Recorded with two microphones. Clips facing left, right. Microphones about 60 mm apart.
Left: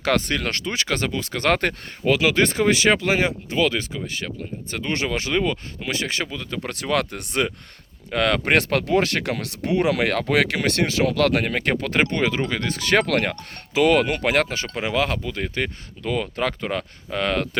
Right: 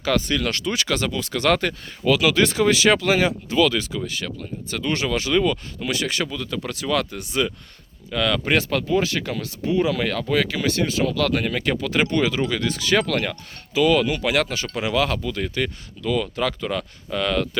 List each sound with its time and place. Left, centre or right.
0.0 s speech: left
0.4 s speech: left
6.7 s speech: left
11.1 s speech: left
14.4 s speech: left